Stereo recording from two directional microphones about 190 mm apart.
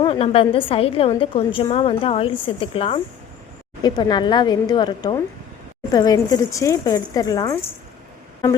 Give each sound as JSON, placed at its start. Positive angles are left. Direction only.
{"t": 0.0, "sound": "a woman's voice", "side_deg": 25}